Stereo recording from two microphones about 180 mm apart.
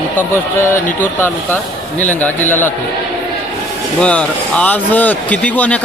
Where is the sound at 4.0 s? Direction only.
5° left (ahead or behind).